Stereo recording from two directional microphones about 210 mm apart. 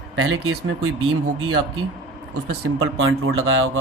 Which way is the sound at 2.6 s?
80° right.